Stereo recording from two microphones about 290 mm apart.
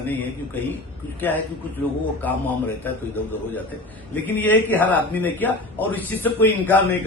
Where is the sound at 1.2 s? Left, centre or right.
Centre.